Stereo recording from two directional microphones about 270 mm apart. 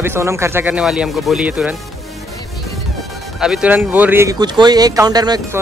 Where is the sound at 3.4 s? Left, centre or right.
Centre.